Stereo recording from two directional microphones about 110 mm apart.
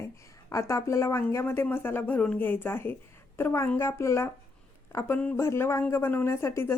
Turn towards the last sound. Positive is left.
turn(degrees=25)  # may be behind; listen again after turning